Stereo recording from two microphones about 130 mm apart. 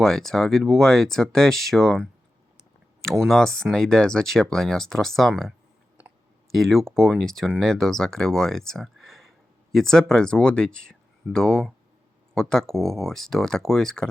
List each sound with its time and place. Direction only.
0.0 s speech: 5° left (ahead or behind)